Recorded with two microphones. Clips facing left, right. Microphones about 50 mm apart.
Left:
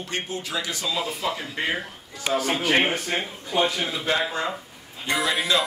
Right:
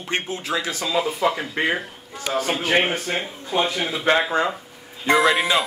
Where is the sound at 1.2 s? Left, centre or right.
Centre.